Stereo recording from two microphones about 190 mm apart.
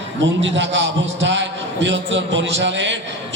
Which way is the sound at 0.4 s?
70° right (ahead or behind).